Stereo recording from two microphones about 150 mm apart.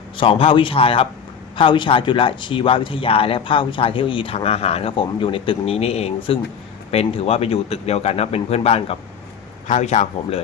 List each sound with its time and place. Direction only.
0.2 s speech: 35° left (ahead or behind)
9.6 s speech: 55° left (ahead or behind)